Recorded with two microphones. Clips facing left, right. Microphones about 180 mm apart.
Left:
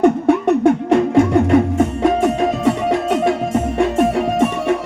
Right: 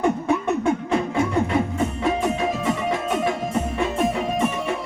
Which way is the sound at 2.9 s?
75° left (ahead or behind).